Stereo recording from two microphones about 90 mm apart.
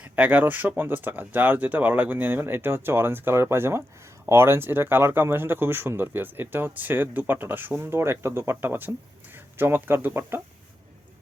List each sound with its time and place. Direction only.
0.0 s speech: 20° right (ahead or behind)